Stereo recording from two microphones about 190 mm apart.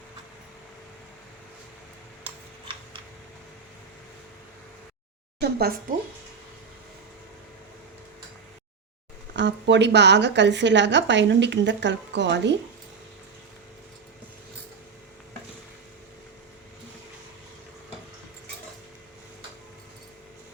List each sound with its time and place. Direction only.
5.4 s speech: 55° right (ahead or behind)
9.3 s speech: 65° right (ahead or behind)